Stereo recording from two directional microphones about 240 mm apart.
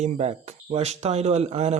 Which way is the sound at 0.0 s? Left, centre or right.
Right.